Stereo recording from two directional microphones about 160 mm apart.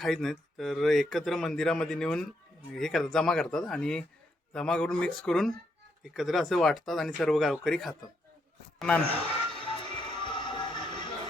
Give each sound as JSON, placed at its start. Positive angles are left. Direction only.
{"t": 0.0, "sound": "speech", "side_deg": 0}
{"t": 9.6, "sound": "music", "side_deg": 35}